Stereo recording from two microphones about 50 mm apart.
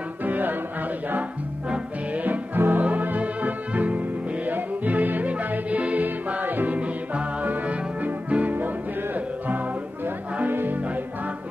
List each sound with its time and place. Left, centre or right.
0.2 s music: right
2.2 s music: right
6.0 s music: right
10.4 s music: right